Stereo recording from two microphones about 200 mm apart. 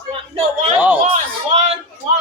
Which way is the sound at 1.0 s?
30° right (ahead or behind).